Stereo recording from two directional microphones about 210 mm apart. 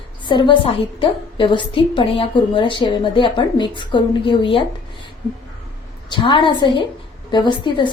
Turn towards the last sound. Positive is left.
turn(degrees=20)  # may be behind; listen again after turning